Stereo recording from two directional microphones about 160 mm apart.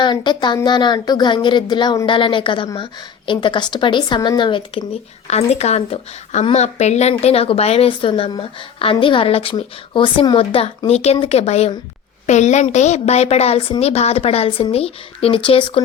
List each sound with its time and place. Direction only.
0.0 s speech: 30° left (ahead or behind)
5.3 s a woman's voice: 40° left (ahead or behind)